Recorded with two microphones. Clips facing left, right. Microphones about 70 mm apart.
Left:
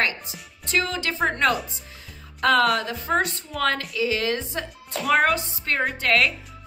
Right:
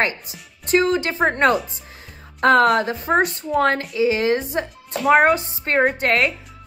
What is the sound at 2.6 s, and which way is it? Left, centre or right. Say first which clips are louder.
Speech: right 5 dB; right.